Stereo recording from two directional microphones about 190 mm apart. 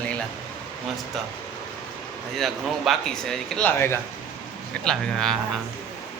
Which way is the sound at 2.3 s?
Centre (ahead or behind).